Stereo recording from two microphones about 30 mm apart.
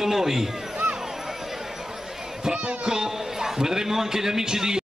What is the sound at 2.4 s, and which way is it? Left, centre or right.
A man's voice, right.